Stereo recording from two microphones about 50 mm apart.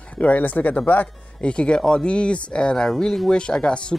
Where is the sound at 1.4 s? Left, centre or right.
Left.